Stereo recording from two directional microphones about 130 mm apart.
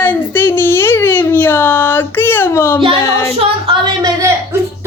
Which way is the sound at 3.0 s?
25° left (ahead or behind).